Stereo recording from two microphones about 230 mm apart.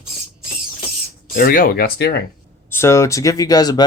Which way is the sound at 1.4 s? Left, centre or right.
Left.